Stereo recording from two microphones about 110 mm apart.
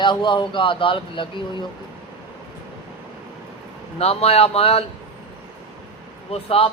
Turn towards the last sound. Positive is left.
turn(degrees=60)  # may be behind; listen again after turning